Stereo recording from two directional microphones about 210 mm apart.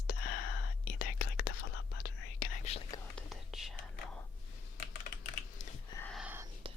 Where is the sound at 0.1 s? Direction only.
45° left (ahead or behind).